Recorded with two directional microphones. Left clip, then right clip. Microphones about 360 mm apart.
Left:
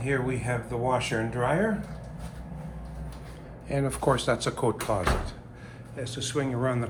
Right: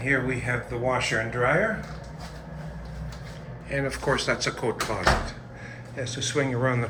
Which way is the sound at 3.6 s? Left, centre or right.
Centre.